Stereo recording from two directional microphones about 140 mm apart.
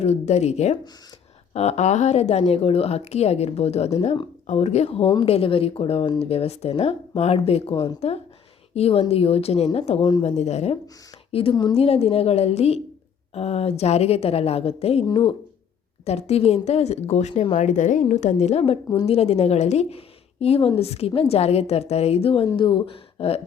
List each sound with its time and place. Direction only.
0.0 s speech: 50° left (ahead or behind)
10.0 s speech: 35° left (ahead or behind)
10.2 s a woman's voice: 50° left (ahead or behind)
15.0 s speech: 35° left (ahead or behind)
16.0 s speech: 50° left (ahead or behind)
17.7 s speech: 65° left (ahead or behind); by 23.4 s 40° left (ahead or behind)